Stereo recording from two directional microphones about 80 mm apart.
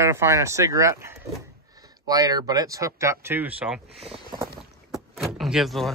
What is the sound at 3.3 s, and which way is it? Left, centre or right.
Speech, right.